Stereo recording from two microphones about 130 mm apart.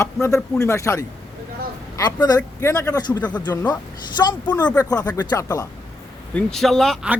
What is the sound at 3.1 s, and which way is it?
Speech, 10° left (ahead or behind).